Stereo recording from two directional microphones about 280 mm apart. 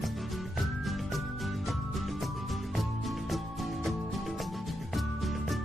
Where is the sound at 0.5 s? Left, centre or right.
Centre.